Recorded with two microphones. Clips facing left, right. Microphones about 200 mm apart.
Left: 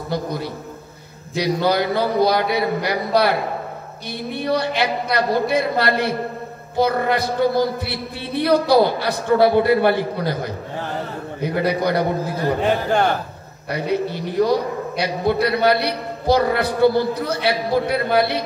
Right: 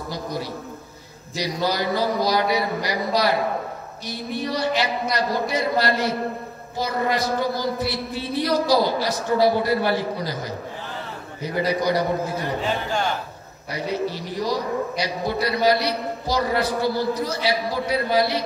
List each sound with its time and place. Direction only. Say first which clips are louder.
0.1 s music: left 5 dB; 60° left (ahead or behind)
1.3 s a man's voice: left 6 dB; 60° left (ahead or behind)